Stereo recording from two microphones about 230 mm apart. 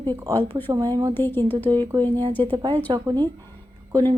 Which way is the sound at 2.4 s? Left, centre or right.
Right.